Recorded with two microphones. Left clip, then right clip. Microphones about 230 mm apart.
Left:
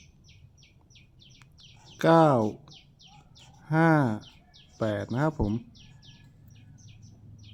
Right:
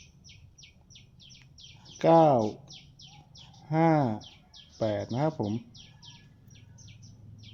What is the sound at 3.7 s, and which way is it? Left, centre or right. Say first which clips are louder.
Speech: left 1 dB; centre.